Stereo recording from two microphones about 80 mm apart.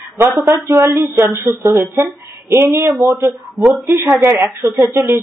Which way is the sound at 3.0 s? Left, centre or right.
Right.